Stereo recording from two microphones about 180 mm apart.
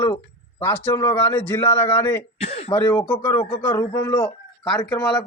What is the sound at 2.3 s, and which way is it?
Speech, 35° left (ahead or behind).